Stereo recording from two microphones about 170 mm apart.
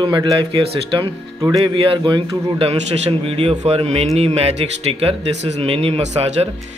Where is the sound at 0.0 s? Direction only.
25° right (ahead or behind).